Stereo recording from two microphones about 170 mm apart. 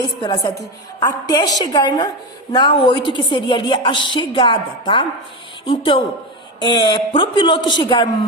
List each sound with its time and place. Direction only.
0.0 s a woman's voice: 25° left (ahead or behind)